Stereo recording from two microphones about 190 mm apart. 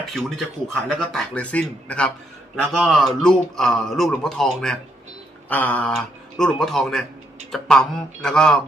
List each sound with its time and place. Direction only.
0.0 s speech: centre (ahead or behind)